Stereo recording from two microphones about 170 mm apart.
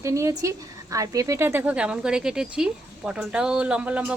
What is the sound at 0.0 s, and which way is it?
Speech, 20° right (ahead or behind).